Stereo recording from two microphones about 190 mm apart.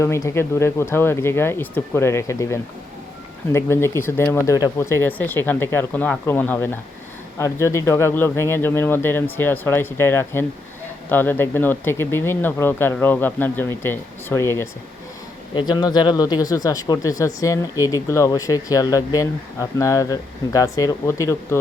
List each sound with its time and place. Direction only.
0.0 s speech: 15° left (ahead or behind)